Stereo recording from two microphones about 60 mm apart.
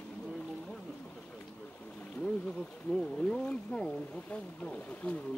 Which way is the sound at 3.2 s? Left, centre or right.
Centre.